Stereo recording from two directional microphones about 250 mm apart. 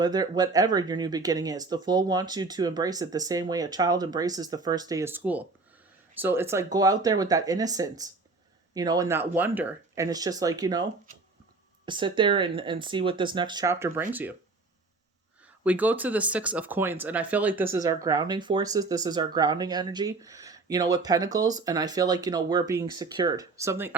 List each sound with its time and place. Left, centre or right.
0.0 s speech: centre
11.9 s speech: centre
15.6 s speech: centre